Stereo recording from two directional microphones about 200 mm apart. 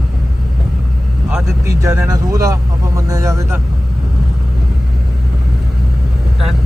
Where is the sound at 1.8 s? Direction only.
15° right (ahead or behind).